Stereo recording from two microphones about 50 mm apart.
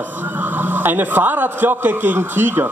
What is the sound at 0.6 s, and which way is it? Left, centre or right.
Speech, right.